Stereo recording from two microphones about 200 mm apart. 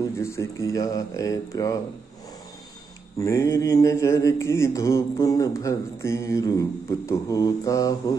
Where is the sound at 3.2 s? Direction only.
15° left (ahead or behind).